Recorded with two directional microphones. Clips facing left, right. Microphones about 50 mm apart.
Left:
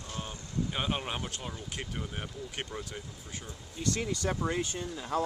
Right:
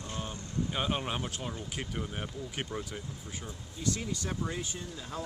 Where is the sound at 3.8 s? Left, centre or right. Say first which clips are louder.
Left 2 dB; left.